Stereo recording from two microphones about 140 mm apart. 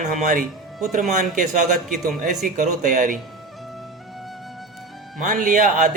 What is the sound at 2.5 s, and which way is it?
Speech, 65° right (ahead or behind).